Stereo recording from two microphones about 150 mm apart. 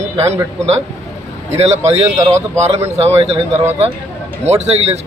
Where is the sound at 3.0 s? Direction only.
45° right (ahead or behind).